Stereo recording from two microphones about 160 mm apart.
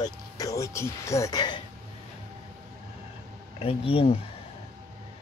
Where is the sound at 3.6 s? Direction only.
35° left (ahead or behind).